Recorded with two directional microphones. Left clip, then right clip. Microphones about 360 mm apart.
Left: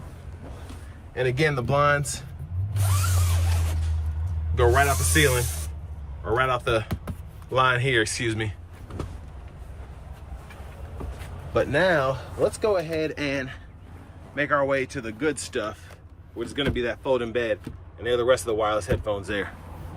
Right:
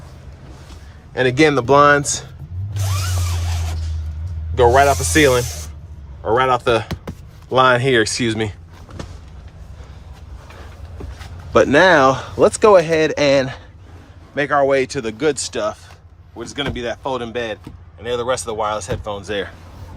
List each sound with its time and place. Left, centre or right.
1.1 s speech: centre
4.5 s a man's voice: centre
11.5 s speech: centre